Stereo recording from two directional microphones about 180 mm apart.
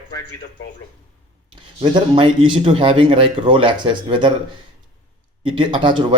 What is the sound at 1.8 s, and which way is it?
Speech, 25° right (ahead or behind).